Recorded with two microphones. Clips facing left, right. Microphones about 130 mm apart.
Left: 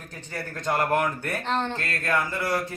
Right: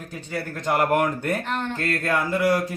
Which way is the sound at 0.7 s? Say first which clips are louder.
Right 3 dB; 15° right (ahead or behind).